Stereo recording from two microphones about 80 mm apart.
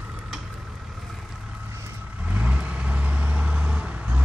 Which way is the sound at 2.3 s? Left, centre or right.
Centre.